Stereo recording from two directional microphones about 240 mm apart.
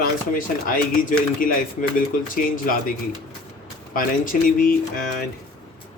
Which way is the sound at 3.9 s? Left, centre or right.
Left.